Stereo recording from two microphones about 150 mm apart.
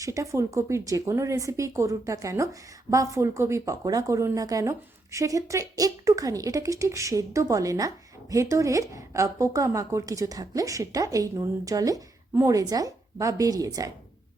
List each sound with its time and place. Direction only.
0.0 s speech: 20° right (ahead or behind)